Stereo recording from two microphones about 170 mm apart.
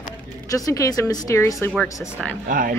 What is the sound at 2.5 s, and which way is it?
Speech, 55° right (ahead or behind).